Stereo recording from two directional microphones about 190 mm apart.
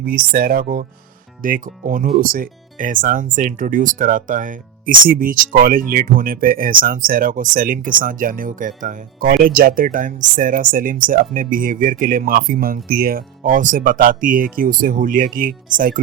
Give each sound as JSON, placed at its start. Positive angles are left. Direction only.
{"t": 0.0, "sound": "speech", "side_deg": -50}